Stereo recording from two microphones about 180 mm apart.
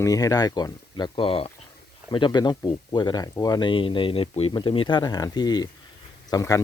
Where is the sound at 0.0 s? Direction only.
20° left (ahead or behind).